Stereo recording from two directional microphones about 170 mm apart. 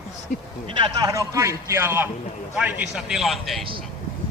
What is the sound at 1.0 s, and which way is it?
A man's voice, 20° right (ahead or behind).